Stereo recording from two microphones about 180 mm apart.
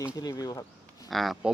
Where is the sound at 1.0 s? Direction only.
Centre (ahead or behind).